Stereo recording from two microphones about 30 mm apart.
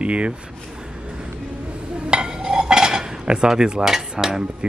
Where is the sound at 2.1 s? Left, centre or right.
Right.